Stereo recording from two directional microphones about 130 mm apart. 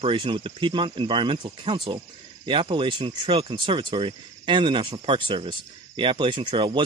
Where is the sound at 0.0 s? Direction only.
40° right (ahead or behind).